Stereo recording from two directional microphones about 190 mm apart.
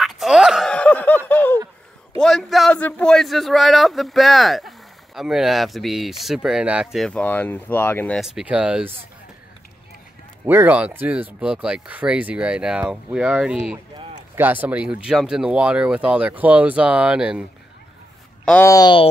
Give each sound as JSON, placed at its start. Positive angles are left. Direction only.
{"t": 0.0, "sound": "a sound", "side_deg": 0}
{"t": 2.1, "sound": "speech", "side_deg": 0}
{"t": 8.2, "sound": "speech", "side_deg": 0}
{"t": 10.4, "sound": "speech", "side_deg": -10}
{"t": 18.4, "sound": "speech", "side_deg": 10}